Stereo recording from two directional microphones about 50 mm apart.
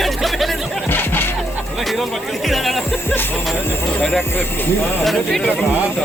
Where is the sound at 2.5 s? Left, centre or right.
Centre.